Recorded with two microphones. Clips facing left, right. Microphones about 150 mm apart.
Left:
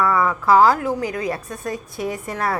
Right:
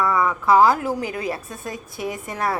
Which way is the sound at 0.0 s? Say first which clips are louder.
Left 2 dB; 20° right (ahead or behind).